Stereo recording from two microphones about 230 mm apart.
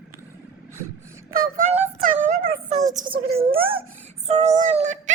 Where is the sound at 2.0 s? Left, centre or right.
Right.